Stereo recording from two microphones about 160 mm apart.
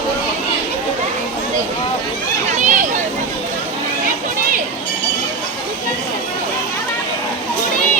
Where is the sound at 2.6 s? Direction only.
50° right (ahead or behind).